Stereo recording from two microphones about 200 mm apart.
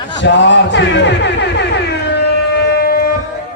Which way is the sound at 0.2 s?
60° left (ahead or behind).